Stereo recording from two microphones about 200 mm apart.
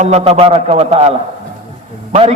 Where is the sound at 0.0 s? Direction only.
30° right (ahead or behind).